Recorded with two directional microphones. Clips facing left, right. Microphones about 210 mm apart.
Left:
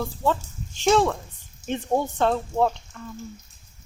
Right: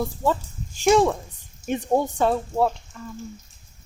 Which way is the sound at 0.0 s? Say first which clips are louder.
Right 1 dB; 10° right (ahead or behind).